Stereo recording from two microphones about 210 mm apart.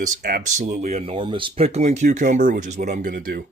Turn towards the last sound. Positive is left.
turn(degrees=-40)  # may be behind; listen again after turning